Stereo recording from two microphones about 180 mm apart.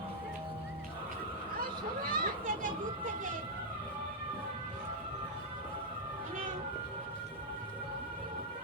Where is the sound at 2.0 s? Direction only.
55° right (ahead or behind).